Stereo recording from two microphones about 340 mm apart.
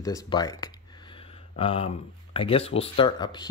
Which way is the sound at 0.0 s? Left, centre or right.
Centre.